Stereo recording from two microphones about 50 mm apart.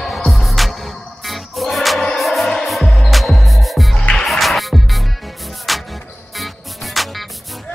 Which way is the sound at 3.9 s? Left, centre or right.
Centre.